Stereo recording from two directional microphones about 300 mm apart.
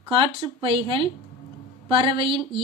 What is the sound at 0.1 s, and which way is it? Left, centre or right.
Speech, centre.